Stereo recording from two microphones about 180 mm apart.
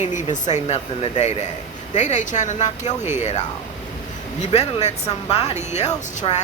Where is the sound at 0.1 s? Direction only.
40° left (ahead or behind).